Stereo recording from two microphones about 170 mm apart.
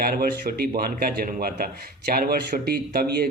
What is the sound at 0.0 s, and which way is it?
Speech, 65° right (ahead or behind).